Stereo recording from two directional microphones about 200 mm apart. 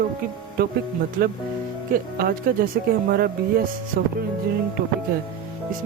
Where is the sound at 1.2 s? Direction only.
50° right (ahead or behind).